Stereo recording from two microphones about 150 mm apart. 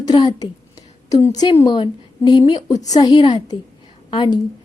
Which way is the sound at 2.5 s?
45° left (ahead or behind).